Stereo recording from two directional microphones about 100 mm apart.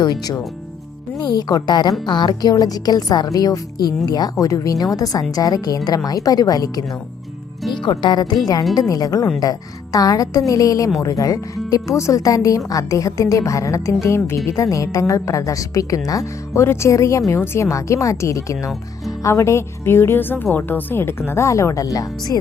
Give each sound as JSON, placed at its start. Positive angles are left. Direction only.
{"t": 0.0, "sound": "a woman's voice", "side_deg": 45}
{"t": 7.7, "sound": "a woman's voice", "side_deg": 50}